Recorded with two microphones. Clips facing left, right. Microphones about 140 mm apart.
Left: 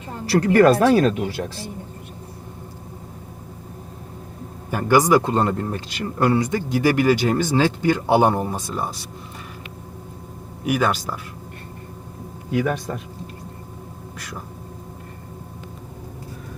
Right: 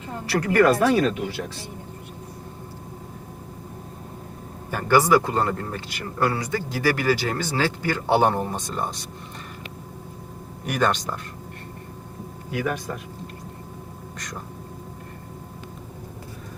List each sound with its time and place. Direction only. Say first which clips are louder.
0.3 s speech: left 4 dB; 30° left (ahead or behind)
4.7 s a man's voice: left 2 dB; 15° left (ahead or behind)
10.6 s speech: left 2 dB; 5° left (ahead or behind)
14.2 s speech: left 1 dB; 5° left (ahead or behind)